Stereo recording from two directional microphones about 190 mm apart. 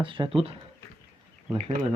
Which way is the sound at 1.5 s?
25° right (ahead or behind).